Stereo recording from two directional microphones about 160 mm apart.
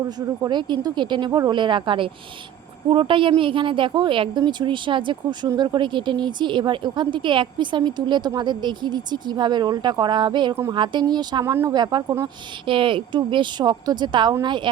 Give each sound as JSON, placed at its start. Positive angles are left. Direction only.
{"t": 0.2, "sound": "a woman's voice", "side_deg": -25}